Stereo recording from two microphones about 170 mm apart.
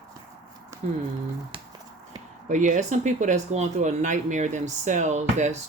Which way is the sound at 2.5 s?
45° right (ahead or behind).